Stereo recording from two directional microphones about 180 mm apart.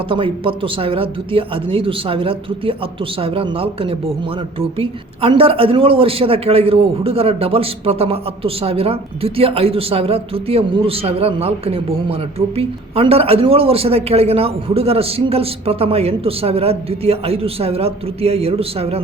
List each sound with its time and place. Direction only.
0.1 s a woman's voice: 30° right (ahead or behind)